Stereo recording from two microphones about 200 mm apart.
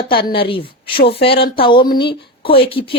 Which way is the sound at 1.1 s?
55° left (ahead or behind).